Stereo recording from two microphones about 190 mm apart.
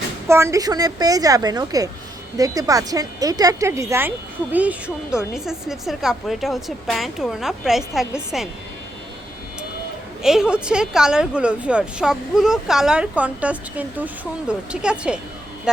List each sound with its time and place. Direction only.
0.3 s a woman's voice: 15° right (ahead or behind)
10.2 s a woman's voice: 5° right (ahead or behind)